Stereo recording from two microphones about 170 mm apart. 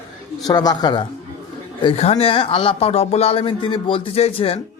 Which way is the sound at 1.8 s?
35° left (ahead or behind).